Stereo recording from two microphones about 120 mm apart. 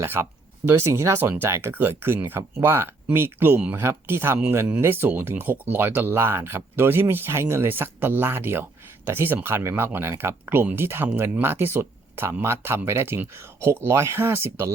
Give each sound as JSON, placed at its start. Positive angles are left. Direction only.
{"t": 0.0, "sound": "speech", "side_deg": -20}